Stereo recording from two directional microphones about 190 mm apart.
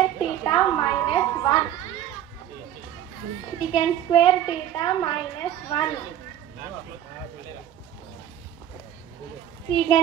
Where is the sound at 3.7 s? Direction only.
25° left (ahead or behind).